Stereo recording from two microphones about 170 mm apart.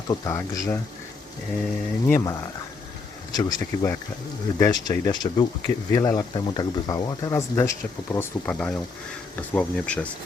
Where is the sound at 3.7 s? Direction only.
25° left (ahead or behind).